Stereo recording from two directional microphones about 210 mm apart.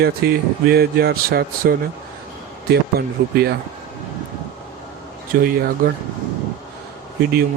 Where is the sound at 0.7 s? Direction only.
50° right (ahead or behind).